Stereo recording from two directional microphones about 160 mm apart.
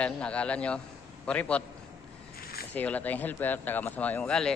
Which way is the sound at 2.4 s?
75° left (ahead or behind).